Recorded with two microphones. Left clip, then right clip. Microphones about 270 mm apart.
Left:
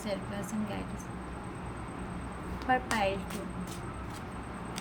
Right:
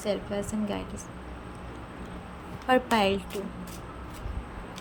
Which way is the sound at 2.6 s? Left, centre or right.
Right.